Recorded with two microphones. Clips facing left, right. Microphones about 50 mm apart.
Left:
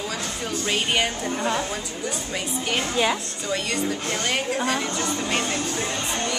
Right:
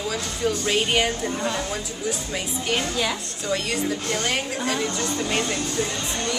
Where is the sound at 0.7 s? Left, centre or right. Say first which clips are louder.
Even; centre.